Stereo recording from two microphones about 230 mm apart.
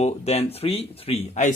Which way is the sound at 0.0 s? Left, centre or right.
Left.